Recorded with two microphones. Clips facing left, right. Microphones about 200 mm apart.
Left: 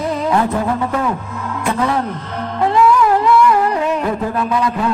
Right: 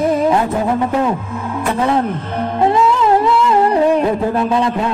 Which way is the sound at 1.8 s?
20° right (ahead or behind).